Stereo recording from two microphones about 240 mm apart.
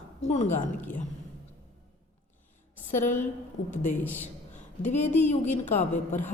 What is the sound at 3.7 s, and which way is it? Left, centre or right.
A woman's voice, left.